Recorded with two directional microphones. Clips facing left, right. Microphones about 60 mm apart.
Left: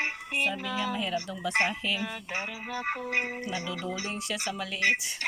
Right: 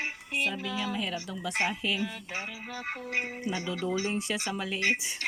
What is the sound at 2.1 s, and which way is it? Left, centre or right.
Music, left.